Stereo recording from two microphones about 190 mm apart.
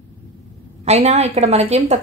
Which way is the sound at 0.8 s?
35° right (ahead or behind).